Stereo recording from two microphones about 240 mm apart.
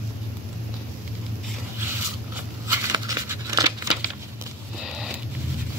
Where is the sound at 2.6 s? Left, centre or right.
Centre.